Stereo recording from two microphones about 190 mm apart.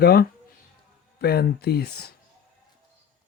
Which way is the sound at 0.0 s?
55° left (ahead or behind).